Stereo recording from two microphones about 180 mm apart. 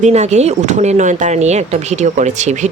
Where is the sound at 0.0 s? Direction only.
40° right (ahead or behind).